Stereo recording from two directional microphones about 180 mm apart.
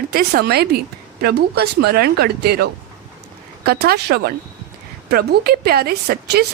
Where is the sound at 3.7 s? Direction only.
60° right (ahead or behind).